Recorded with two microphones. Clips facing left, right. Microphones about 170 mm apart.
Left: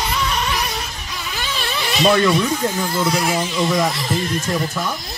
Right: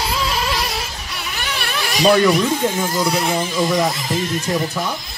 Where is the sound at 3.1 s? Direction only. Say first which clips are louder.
Even; centre (ahead or behind).